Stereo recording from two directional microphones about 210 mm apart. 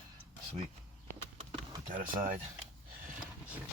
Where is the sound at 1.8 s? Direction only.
40° right (ahead or behind).